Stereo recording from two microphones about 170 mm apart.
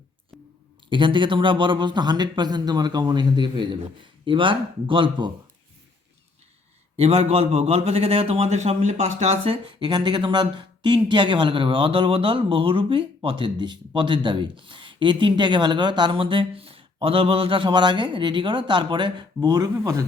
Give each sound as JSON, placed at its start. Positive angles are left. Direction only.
{"t": 0.9, "sound": "a man's voice", "side_deg": -30}
{"t": 6.9, "sound": "a man's voice", "side_deg": -40}